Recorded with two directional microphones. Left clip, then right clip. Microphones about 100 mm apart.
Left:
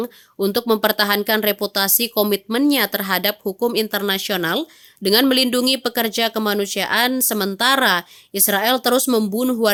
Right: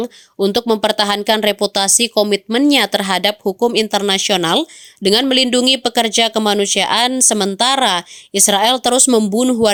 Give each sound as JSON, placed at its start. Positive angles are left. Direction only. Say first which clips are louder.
{"t": 0.0, "sound": "speech", "louder": "right 4 dB", "side_deg": -20}
{"t": 5.3, "sound": "a woman's voice", "louder": "right 4 dB", "side_deg": -20}